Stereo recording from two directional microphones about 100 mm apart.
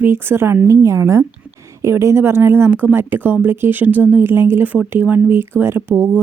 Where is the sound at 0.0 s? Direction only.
20° right (ahead or behind).